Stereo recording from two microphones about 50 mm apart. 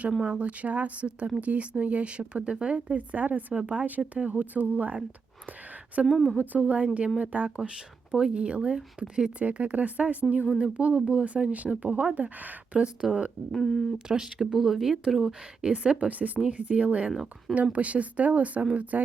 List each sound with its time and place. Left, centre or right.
0.2 s speech: right
6.1 s a woman's voice: centre
6.3 s speech: right; by 9.3 s centre
9.4 s speech: right
13.0 s a woman's voice: centre
13.5 s speech: centre
14.1 s speech: centre
15.3 s speech: centre